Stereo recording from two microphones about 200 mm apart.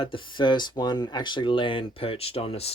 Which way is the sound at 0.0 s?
25° left (ahead or behind).